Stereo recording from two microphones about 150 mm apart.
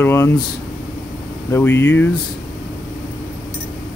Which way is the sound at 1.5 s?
15° left (ahead or behind).